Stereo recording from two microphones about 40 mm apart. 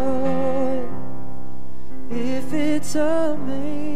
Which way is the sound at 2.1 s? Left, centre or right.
Centre.